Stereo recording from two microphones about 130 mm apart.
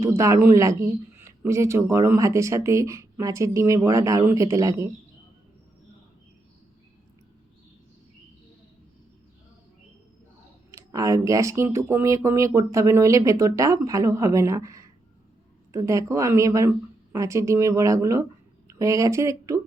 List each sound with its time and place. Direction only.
0.0 s speech: 20° right (ahead or behind)
10.7 s speech: 25° right (ahead or behind)